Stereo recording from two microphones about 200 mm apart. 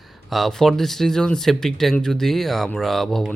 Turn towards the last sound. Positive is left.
turn(degrees=0)  # may be behind; listen again after turning